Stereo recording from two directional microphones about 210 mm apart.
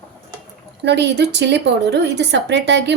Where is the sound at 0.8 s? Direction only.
55° right (ahead or behind).